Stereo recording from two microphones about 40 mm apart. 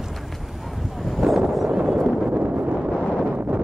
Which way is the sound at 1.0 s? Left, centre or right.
Centre.